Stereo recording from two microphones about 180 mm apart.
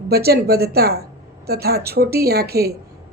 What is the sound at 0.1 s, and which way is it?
Speech, 60° right (ahead or behind).